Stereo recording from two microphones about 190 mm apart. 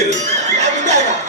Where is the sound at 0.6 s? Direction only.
35° right (ahead or behind).